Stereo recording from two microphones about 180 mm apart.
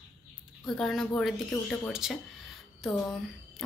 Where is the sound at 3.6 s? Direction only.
Centre (ahead or behind).